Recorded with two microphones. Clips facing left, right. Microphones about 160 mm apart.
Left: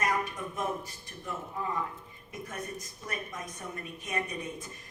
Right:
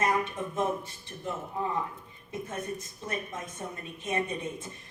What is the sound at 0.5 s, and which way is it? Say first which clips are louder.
A woman's voice: right 5 dB; 25° right (ahead or behind).